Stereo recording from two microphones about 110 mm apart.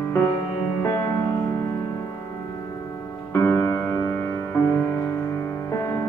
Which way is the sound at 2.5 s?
30° left (ahead or behind).